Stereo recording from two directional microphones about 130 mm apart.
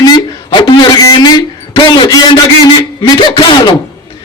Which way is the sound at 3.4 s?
35° left (ahead or behind).